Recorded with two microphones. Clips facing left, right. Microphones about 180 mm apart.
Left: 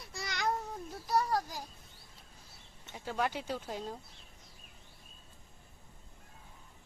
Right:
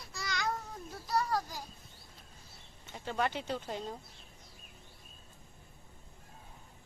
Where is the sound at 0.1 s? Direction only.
25° left (ahead or behind).